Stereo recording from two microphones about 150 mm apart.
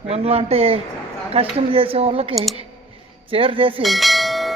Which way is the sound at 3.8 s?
Centre (ahead or behind).